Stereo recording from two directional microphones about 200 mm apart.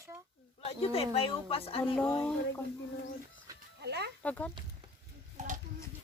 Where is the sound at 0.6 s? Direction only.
30° left (ahead or behind).